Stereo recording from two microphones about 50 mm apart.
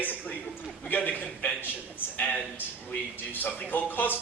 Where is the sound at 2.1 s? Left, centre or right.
Left.